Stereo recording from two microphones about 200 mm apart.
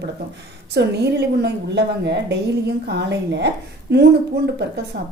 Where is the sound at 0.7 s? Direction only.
55° right (ahead or behind).